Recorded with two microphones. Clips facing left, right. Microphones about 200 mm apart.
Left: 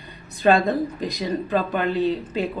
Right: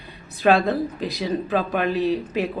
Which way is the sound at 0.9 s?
5° right (ahead or behind).